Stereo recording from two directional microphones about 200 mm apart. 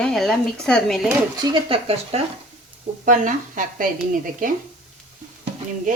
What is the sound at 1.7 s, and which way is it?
Speech, 30° right (ahead or behind).